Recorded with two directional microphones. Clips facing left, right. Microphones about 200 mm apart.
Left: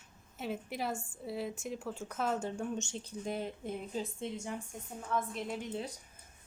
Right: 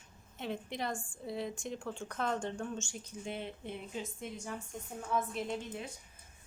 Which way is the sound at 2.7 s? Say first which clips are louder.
Left 3 dB; 20° left (ahead or behind).